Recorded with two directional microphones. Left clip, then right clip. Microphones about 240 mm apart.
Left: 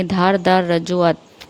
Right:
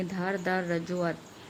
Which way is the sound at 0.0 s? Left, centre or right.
Left.